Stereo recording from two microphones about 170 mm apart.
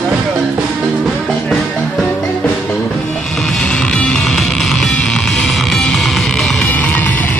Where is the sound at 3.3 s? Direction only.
Centre (ahead or behind).